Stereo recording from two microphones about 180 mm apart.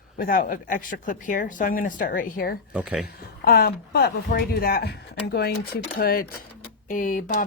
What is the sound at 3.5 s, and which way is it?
Speech, 60° left (ahead or behind).